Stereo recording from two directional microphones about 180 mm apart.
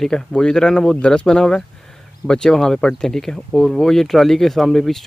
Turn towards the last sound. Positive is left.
turn(degrees=0)  # may be behind; listen again after turning